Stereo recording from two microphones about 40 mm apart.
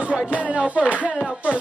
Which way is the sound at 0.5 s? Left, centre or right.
Right.